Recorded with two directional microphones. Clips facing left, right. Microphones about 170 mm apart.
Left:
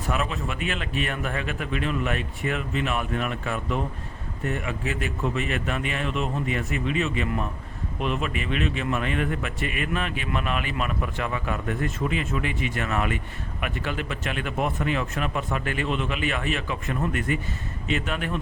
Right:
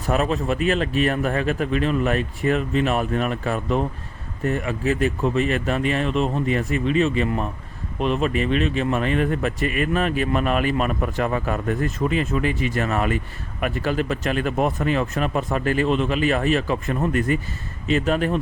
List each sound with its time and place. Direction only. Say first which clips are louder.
0.1 s a man's voice: right 8 dB; 40° right (ahead or behind)